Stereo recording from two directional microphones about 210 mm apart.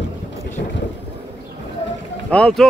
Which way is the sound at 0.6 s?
50° left (ahead or behind).